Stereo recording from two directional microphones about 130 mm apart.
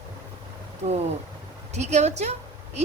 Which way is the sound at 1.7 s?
60° right (ahead or behind).